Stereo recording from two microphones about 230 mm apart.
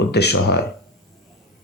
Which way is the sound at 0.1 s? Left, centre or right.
Left.